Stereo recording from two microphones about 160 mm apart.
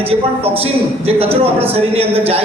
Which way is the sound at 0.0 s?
35° right (ahead or behind).